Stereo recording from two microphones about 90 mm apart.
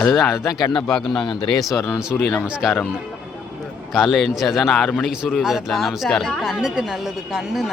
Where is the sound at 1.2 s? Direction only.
65° left (ahead or behind).